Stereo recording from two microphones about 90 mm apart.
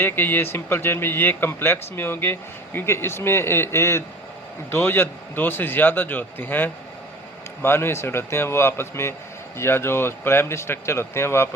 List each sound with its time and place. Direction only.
0.0 s a man's voice: 25° left (ahead or behind)